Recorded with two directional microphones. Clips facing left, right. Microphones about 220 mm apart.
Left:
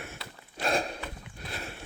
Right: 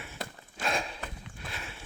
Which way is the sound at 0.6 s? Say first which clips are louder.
Left 4 dB; 40° left (ahead or behind).